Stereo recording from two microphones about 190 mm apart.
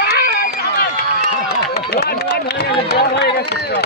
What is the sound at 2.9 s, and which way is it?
Run, 60° left (ahead or behind).